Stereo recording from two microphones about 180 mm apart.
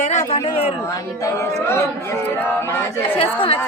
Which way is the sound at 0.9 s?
20° left (ahead or behind).